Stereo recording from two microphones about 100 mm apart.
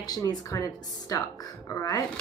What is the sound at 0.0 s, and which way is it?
Speech, 40° left (ahead or behind).